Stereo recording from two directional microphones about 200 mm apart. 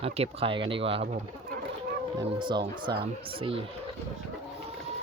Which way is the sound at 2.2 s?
25° right (ahead or behind).